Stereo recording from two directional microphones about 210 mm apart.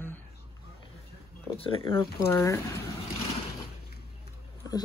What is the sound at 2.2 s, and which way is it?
Speech, 15° left (ahead or behind).